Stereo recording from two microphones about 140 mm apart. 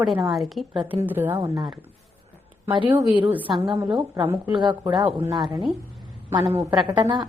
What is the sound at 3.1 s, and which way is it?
Speech, 10° right (ahead or behind).